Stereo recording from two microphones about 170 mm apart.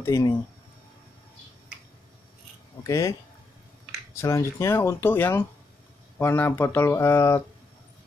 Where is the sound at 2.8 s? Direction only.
20° left (ahead or behind).